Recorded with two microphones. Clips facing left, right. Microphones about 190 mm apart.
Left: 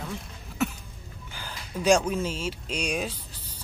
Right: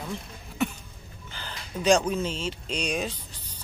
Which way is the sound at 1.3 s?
10° left (ahead or behind).